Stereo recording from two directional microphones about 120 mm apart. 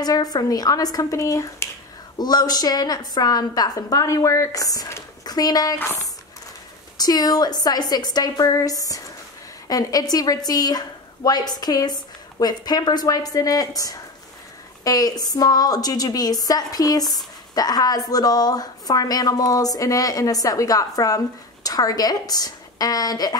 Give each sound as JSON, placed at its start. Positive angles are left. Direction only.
{"t": 0.0, "sound": "a woman's voice", "side_deg": 35}
{"t": 5.8, "sound": "speech", "side_deg": 20}
{"t": 7.0, "sound": "a woman's voice", "side_deg": 35}